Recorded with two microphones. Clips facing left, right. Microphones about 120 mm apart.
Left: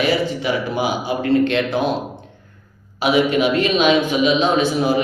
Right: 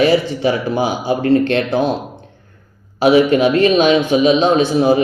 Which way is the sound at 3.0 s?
40° right (ahead or behind).